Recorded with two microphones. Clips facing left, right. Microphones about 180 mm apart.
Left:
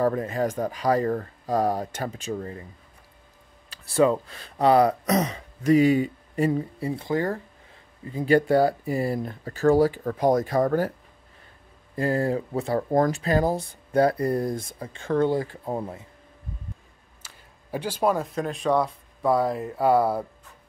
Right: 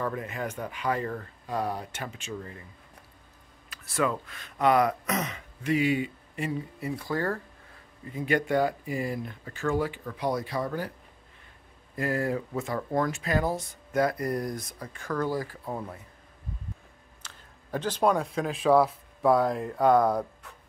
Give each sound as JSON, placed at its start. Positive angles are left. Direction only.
{"t": 0.0, "sound": "speech", "side_deg": 35}
{"t": 3.7, "sound": "speech", "side_deg": 30}
{"t": 8.1, "sound": "speech", "side_deg": 35}
{"t": 11.9, "sound": "speech", "side_deg": 30}
{"t": 17.2, "sound": "speech", "side_deg": 10}